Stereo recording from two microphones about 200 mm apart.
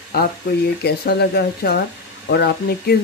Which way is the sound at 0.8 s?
50° left (ahead or behind).